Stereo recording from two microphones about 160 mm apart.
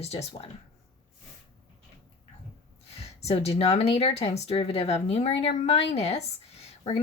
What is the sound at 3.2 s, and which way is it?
Speech, 40° left (ahead or behind).